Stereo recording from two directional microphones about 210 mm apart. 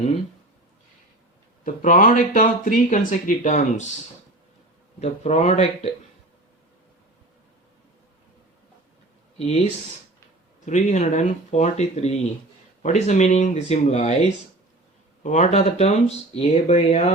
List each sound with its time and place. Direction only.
1.6 s speech: 40° left (ahead or behind)
4.9 s speech: 30° left (ahead or behind)
10.7 s speech: 35° left (ahead or behind)